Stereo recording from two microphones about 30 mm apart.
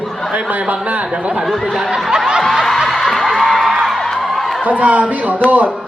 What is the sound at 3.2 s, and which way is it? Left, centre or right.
Music, centre.